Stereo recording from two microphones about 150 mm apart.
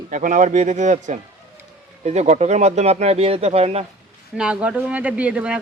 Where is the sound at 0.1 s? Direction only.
60° right (ahead or behind); by 3.8 s 45° right (ahead or behind).